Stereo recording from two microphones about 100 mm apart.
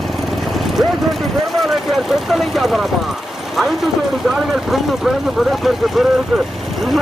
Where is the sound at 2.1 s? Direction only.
Centre (ahead or behind).